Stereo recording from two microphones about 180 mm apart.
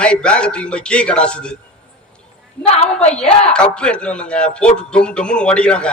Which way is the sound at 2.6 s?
35° left (ahead or behind).